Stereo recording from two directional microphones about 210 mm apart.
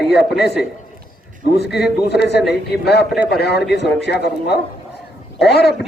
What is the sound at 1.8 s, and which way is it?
A man's voice, 50° left (ahead or behind).